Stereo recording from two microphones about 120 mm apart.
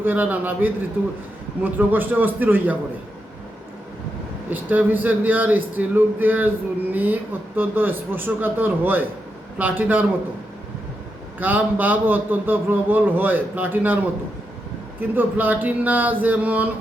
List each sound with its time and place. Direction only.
0.0 s a man's voice: 15° right (ahead or behind)
4.4 s a man's voice: 15° right (ahead or behind)
11.3 s a man's voice: 15° right (ahead or behind)
15.1 s a man's voice: 15° right (ahead or behind)